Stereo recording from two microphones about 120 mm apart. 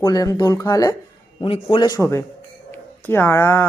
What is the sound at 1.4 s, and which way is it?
Speech, 45° left (ahead or behind).